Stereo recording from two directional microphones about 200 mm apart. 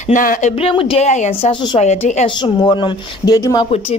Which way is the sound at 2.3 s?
20° left (ahead or behind).